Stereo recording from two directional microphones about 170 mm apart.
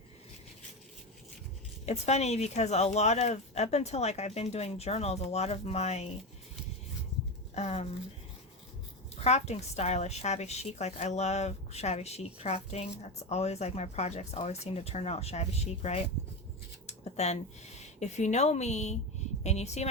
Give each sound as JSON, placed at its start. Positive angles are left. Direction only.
{"t": 1.9, "sound": "a woman's voice", "side_deg": 40}
{"t": 7.5, "sound": "speech", "side_deg": 40}
{"t": 9.2, "sound": "a woman's voice", "side_deg": 40}
{"t": 16.8, "sound": "a sound", "side_deg": 40}
{"t": 17.7, "sound": "a woman's voice", "side_deg": 40}